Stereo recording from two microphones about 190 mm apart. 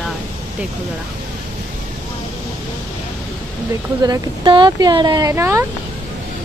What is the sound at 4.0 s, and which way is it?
Speech, 20° right (ahead or behind).